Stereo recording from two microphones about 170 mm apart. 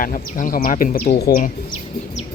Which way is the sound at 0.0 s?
50° left (ahead or behind).